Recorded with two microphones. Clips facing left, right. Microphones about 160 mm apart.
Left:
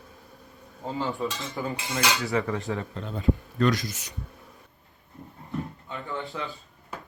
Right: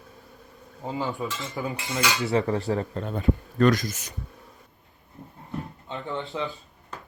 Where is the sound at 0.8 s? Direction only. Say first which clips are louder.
Even; 15° right (ahead or behind).